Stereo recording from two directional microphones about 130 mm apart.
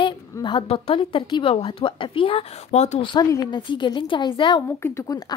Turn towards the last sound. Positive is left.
turn(degrees=20)  # may be behind; listen again after turning